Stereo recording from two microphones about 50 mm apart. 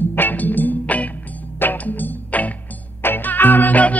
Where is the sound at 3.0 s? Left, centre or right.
Left.